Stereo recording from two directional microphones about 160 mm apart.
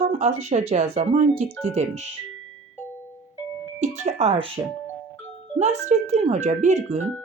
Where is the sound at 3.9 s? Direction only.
45° right (ahead or behind).